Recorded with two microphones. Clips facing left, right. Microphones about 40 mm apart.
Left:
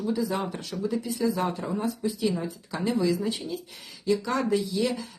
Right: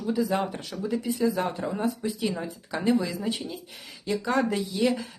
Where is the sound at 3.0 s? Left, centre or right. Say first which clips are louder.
Left 4 dB; centre.